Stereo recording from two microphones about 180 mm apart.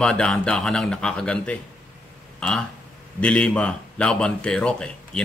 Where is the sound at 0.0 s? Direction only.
5° left (ahead or behind).